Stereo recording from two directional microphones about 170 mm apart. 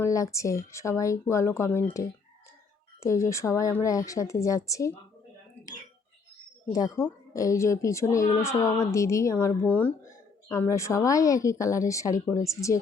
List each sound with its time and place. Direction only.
0.0 s speech: 20° left (ahead or behind)
6.7 s speech: 20° left (ahead or behind)